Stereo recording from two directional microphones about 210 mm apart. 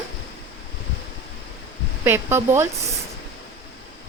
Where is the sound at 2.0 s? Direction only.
10° right (ahead or behind).